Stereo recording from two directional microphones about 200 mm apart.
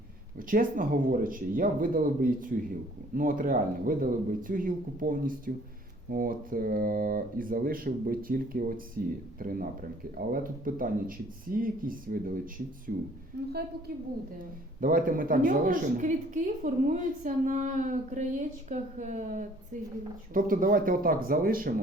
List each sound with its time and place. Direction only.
0.3 s speech: 45° right (ahead or behind)
13.3 s a woman's voice: 55° right (ahead or behind)
14.8 s a woman's voice: 45° right (ahead or behind)